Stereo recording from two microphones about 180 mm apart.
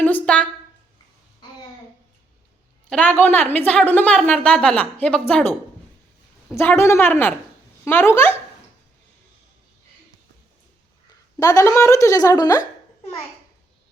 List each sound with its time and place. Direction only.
0.0 s a sound: 5° left (ahead or behind)
2.9 s a woman's voice: 10° left (ahead or behind)
11.3 s a woman's voice: 20° left (ahead or behind)